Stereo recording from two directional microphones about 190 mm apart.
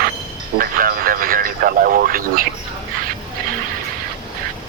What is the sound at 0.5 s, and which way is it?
Radio, 50° right (ahead or behind).